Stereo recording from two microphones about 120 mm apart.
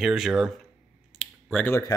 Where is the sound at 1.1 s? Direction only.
5° left (ahead or behind).